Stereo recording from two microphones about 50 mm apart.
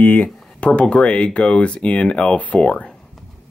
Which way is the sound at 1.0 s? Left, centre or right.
Left.